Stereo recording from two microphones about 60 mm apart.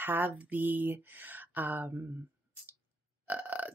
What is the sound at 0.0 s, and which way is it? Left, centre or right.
Speech, right.